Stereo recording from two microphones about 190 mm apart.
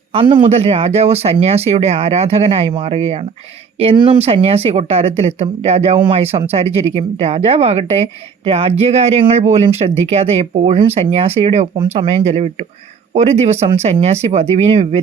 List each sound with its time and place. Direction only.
0.1 s speech: 25° right (ahead or behind)